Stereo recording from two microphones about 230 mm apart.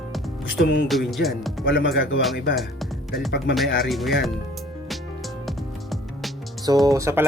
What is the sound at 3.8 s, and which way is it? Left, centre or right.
Music, centre.